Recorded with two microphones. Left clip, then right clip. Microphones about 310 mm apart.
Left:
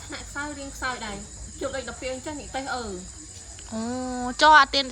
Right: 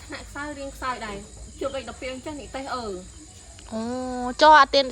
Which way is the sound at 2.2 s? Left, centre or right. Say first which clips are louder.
Left 1 dB; centre.